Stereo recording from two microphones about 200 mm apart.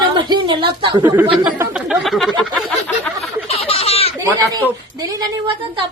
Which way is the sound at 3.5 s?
30° left (ahead or behind).